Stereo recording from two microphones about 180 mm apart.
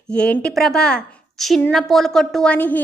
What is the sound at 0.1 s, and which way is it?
A woman's voice, 5° left (ahead or behind).